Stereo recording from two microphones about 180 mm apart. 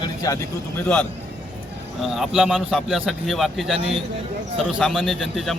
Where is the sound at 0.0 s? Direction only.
20° left (ahead or behind).